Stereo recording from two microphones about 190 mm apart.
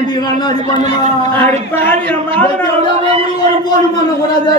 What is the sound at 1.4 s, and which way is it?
Speech, 10° left (ahead or behind).